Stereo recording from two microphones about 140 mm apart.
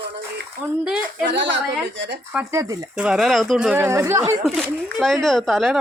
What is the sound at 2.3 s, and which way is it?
Speech, 20° right (ahead or behind).